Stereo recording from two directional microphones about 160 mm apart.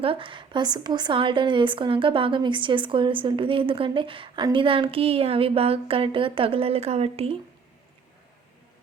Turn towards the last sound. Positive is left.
turn(degrees=-40)  # may be behind; listen again after turning